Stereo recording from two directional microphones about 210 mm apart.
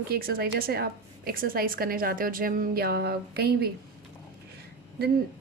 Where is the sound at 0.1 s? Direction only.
45° right (ahead or behind).